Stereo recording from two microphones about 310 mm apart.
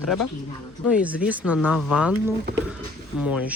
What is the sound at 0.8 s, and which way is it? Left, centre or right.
Speech, centre.